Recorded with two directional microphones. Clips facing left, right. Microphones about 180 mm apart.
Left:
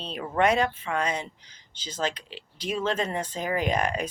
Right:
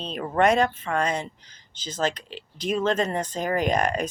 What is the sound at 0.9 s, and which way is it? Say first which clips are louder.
Speech: right 3 dB; 50° right (ahead or behind).